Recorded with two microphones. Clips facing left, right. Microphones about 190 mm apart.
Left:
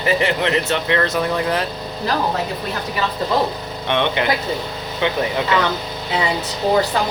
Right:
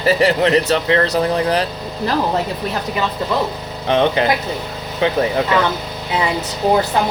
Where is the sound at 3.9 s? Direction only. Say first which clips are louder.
Right 4 dB; 35° right (ahead or behind).